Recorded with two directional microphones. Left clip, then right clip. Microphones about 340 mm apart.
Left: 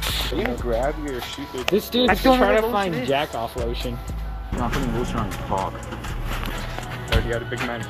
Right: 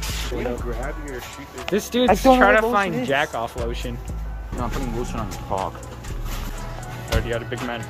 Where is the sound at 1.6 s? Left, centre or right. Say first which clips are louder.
Left 1 dB; centre.